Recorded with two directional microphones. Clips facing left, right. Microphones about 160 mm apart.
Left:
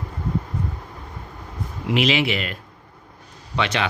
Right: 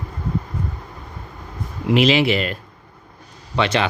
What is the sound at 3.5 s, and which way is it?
Speech, 35° right (ahead or behind).